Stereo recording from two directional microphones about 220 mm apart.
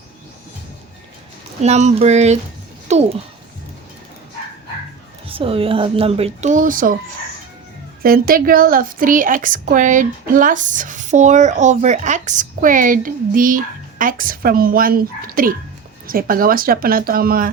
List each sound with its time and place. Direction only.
1.6 s a woman's voice: 30° right (ahead or behind)
5.3 s speech: 25° right (ahead or behind)
8.0 s a woman's voice: 40° right (ahead or behind)